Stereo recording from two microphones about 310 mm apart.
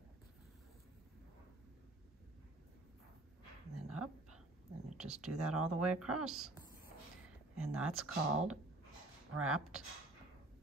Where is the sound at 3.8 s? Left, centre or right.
Right.